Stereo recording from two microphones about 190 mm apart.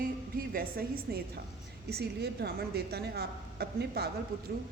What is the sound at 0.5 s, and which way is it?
A woman's voice, 55° right (ahead or behind).